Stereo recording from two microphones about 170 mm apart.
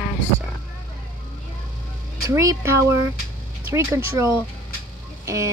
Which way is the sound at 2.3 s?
15° right (ahead or behind).